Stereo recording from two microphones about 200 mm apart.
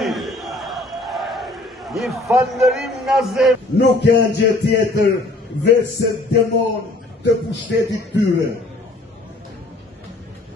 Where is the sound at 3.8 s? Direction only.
60° left (ahead or behind).